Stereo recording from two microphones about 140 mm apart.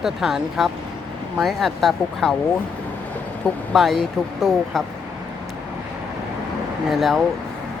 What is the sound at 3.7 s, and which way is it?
Speech, centre (ahead or behind).